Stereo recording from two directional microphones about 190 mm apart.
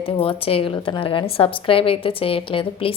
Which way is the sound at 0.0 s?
30° left (ahead or behind).